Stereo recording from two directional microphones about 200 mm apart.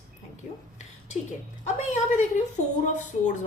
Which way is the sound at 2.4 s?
40° left (ahead or behind).